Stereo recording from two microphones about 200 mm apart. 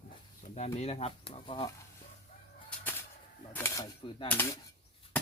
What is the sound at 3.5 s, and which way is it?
Cash register, 15° left (ahead or behind).